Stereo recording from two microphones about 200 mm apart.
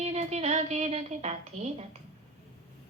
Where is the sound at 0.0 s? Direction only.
35° right (ahead or behind).